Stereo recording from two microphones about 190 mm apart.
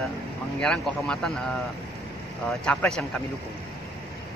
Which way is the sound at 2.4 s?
5° left (ahead or behind).